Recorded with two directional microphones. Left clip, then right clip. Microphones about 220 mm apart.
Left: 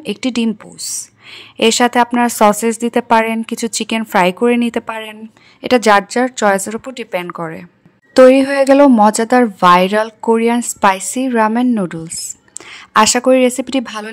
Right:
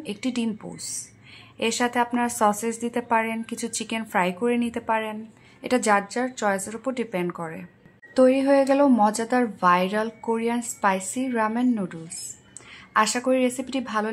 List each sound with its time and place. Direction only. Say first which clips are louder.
0.0 s speech: left 10 dB; 45° left (ahead or behind)
8.1 s speech: left 11 dB; 50° left (ahead or behind)